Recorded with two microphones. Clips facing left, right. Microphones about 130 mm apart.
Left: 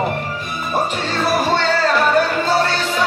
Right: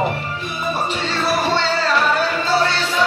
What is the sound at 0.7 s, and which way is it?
Music, 45° left (ahead or behind).